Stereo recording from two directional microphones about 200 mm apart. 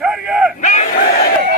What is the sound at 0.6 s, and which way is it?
Battle cry, 35° left (ahead or behind).